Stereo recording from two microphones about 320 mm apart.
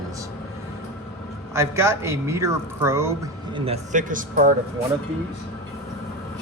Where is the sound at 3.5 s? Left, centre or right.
Centre.